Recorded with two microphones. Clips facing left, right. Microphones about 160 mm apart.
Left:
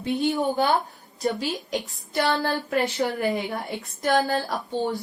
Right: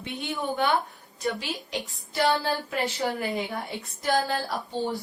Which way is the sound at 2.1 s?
55° left (ahead or behind).